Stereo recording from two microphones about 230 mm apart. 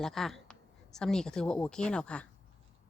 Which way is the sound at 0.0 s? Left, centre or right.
Centre.